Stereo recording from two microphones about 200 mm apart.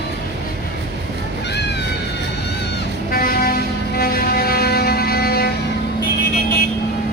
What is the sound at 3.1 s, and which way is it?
Vehicle, 45° left (ahead or behind).